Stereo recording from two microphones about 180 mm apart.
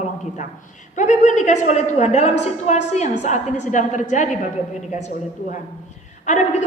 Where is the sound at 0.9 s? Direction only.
45° left (ahead or behind).